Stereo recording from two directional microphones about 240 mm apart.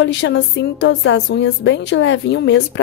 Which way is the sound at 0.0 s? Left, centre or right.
Left.